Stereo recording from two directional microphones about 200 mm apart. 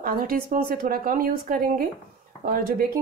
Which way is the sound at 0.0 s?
45° right (ahead or behind).